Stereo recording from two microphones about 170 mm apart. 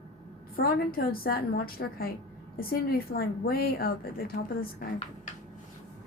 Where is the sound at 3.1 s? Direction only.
65° left (ahead or behind).